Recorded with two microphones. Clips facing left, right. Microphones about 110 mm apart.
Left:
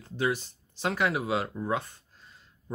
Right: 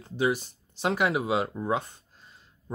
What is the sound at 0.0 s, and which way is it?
Speech, 15° right (ahead or behind).